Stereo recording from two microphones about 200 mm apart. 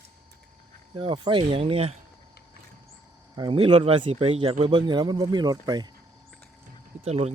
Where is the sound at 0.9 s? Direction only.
25° right (ahead or behind).